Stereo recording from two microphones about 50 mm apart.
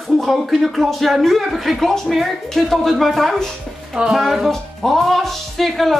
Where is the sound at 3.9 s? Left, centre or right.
Centre.